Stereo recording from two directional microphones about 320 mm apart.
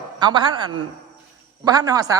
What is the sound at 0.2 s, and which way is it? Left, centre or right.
Speech, centre.